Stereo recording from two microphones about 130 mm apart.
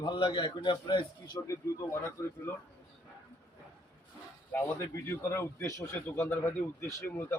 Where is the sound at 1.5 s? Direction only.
20° left (ahead or behind).